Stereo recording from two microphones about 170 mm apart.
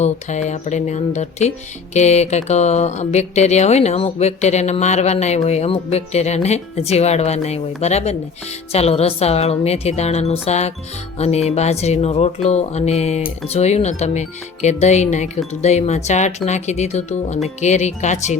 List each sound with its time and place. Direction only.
0.0 s music: 45° left (ahead or behind)
16.5 s speech: 40° left (ahead or behind)